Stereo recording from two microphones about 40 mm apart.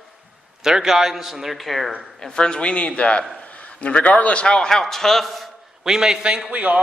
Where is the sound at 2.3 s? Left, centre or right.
Left.